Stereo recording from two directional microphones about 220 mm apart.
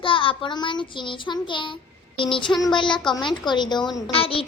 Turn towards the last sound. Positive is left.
turn(degrees=25)  # may be behind; listen again after turning